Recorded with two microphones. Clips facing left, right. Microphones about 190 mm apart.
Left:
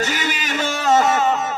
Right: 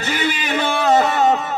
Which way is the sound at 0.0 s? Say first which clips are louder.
Right 2 dB; 40° left (ahead or behind).